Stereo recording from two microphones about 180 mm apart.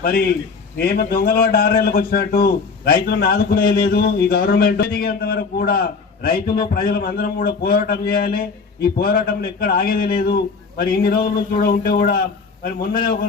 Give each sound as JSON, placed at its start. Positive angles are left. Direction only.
{"t": 0.0, "sound": "a man's voice", "side_deg": 55}